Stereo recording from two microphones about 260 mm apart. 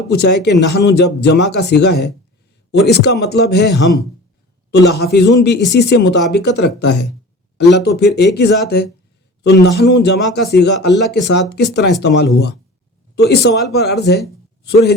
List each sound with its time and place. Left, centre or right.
0.1 s speech: left
7.7 s speech: left